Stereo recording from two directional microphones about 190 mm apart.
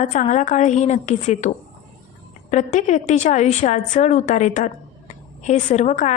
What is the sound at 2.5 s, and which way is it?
A woman's voice, 40° left (ahead or behind).